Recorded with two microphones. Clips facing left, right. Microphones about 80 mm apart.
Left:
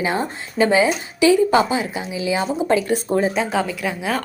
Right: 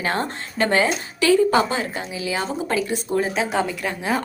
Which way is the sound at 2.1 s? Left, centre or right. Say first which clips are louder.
Left 4 dB; left.